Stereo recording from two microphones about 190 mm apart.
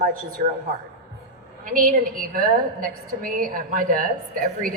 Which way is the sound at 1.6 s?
45° right (ahead or behind).